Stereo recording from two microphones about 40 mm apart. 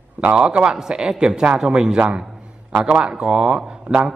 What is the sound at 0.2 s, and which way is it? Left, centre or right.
A man's voice, right.